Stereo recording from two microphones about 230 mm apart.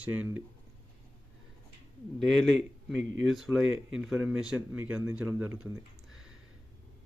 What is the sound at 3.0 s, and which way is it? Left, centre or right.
Speech, right.